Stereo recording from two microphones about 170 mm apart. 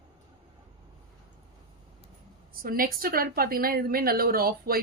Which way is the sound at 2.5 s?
60° right (ahead or behind).